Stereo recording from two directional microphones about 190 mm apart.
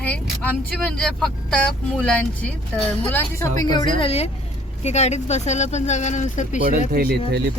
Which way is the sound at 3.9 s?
30° left (ahead or behind).